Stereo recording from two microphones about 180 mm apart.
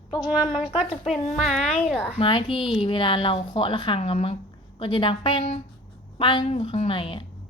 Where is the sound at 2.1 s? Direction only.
30° left (ahead or behind).